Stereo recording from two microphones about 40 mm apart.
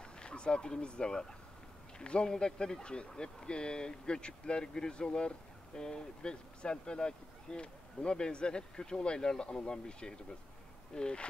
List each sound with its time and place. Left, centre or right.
0.2 s speech: left